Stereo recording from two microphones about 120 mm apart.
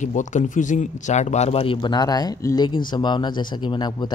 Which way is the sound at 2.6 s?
40° left (ahead or behind).